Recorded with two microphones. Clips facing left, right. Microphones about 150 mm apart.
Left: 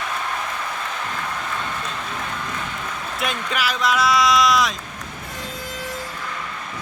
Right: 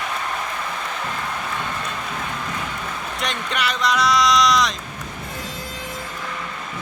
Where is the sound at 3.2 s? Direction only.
5° left (ahead or behind).